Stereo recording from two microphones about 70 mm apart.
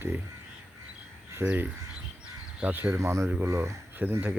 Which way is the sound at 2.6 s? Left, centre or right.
Right.